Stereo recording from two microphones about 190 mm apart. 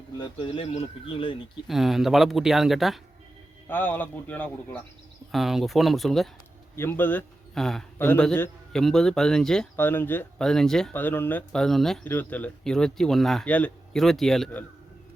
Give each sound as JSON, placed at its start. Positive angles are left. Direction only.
{"t": 0.2, "sound": "speech", "side_deg": 25}
{"t": 1.6, "sound": "a man's voice", "side_deg": 0}
{"t": 3.7, "sound": "a man's voice", "side_deg": 10}
{"t": 6.7, "sound": "a man's voice", "side_deg": 10}